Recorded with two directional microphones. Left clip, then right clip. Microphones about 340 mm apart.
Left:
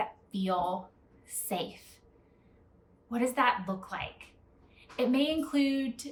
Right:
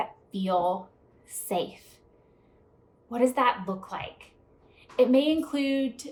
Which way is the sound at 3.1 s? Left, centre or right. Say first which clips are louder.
Right 4 dB; centre.